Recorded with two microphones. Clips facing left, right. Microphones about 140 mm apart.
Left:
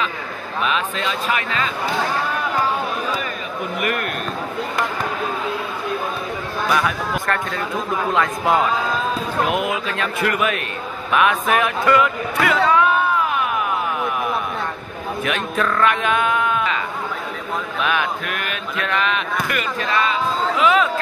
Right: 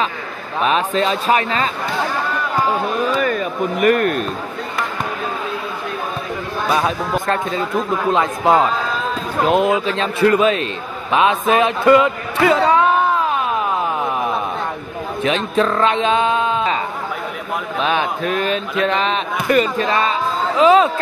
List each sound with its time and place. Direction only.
0.6 s speech: 35° right (ahead or behind)
3.8 s speech: 40° right (ahead or behind)
6.7 s a man's voice: 25° right (ahead or behind)
13.3 s a sound: 25° right (ahead or behind)
15.2 s speech: 25° right (ahead or behind)